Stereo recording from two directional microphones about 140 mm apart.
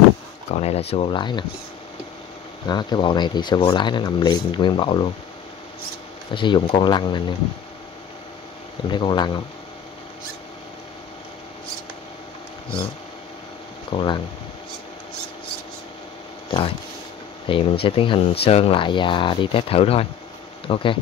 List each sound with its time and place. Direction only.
0.5 s speech: 50° left (ahead or behind)
2.7 s speech: 30° left (ahead or behind)
6.3 s speech: 35° left (ahead or behind)
8.8 s speech: 35° left (ahead or behind)
13.9 s speech: 35° left (ahead or behind)
16.4 s speech: 40° left (ahead or behind)